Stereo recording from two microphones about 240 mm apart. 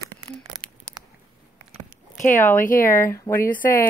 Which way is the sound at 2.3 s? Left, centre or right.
Centre.